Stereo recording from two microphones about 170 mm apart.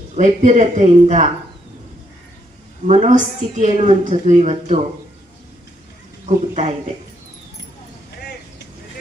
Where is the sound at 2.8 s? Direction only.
45° right (ahead or behind).